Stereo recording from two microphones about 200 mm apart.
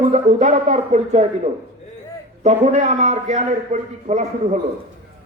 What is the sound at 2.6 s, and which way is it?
A man's voice, 40° right (ahead or behind).